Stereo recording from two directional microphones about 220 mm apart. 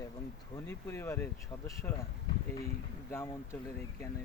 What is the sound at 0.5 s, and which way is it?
Speech, 10° left (ahead or behind).